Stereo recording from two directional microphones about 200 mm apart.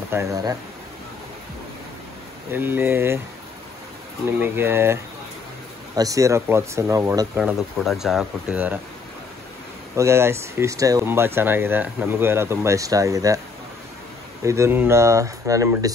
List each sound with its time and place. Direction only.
0.1 s speech: 15° right (ahead or behind)
2.5 s speech: 10° right (ahead or behind)
4.4 s speech: 10° right (ahead or behind)
9.9 s speech: 15° right (ahead or behind)
14.4 s speech: 15° right (ahead or behind)